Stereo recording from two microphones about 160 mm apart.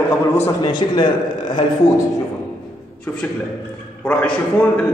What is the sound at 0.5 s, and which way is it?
A man's voice, 25° left (ahead or behind).